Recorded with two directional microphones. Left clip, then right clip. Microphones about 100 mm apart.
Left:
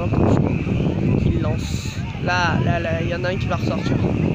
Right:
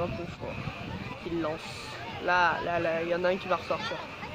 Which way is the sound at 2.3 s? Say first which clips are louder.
Left 5 dB; 45° left (ahead or behind).